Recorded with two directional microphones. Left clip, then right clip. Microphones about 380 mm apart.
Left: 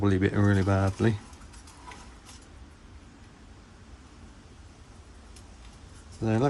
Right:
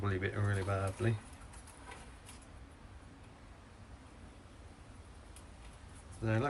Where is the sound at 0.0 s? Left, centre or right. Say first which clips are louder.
Left 12 dB; centre.